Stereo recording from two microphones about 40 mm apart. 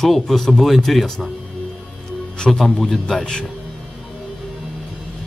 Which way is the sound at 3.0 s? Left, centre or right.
Left.